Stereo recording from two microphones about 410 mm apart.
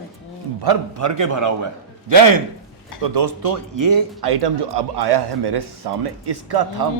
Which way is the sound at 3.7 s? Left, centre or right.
Right.